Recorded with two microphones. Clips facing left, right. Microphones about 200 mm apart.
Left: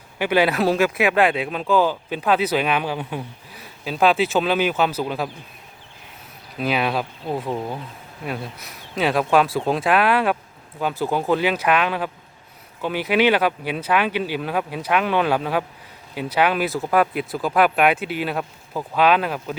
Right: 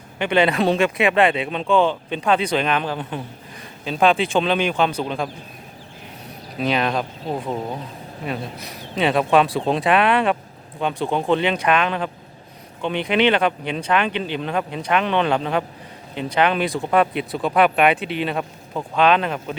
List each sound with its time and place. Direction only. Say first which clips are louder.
0.2 s speech: right 1 dB; 5° left (ahead or behind)
6.6 s speech: right 1 dB; 5° left (ahead or behind)